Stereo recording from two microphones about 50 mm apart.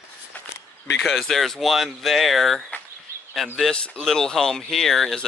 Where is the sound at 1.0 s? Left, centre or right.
Centre.